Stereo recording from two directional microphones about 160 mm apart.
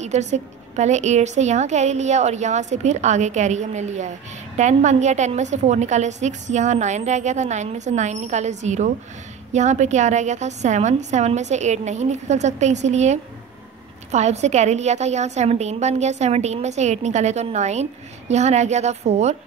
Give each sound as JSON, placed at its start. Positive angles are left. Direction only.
{"t": 0.0, "sound": "a woman's voice", "side_deg": -45}